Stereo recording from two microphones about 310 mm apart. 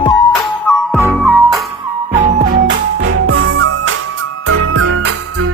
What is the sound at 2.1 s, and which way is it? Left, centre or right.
Music, right.